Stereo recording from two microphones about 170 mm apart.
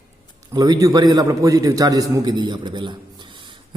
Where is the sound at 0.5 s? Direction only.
20° right (ahead or behind).